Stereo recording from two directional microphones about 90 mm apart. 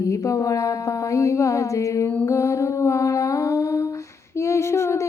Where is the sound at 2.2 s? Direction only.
35° left (ahead or behind).